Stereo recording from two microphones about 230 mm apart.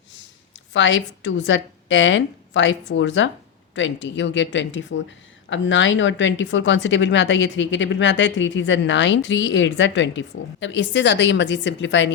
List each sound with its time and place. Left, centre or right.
0.7 s a woman's voice: left